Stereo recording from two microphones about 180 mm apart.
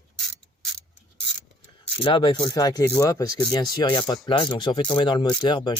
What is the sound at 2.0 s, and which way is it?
Speech, 25° left (ahead or behind).